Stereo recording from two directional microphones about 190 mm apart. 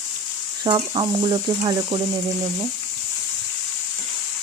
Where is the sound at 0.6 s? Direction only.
25° right (ahead or behind).